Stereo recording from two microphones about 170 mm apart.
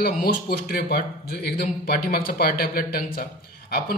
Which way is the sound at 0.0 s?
70° left (ahead or behind).